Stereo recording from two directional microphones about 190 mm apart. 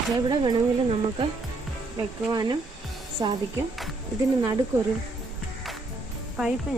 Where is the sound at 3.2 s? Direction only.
20° right (ahead or behind).